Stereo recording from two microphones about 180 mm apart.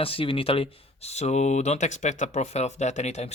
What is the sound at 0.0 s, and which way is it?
Speech, 30° left (ahead or behind).